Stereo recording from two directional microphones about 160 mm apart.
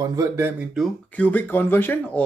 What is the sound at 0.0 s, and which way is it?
Speech, 20° right (ahead or behind).